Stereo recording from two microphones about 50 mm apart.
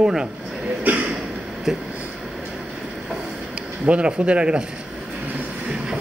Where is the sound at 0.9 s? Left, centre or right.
Right.